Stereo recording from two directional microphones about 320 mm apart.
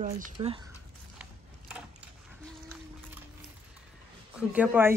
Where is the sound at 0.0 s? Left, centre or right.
Right.